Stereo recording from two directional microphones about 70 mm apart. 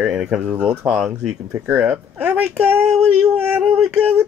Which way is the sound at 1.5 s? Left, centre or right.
Right.